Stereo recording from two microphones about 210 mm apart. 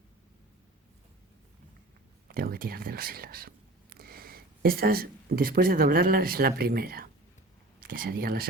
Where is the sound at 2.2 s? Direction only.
45° right (ahead or behind).